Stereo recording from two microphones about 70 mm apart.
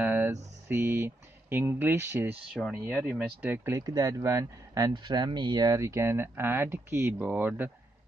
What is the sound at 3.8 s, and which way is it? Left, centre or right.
Speech, right.